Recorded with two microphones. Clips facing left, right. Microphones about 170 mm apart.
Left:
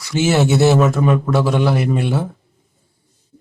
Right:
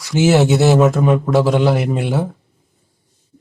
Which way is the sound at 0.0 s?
15° right (ahead or behind).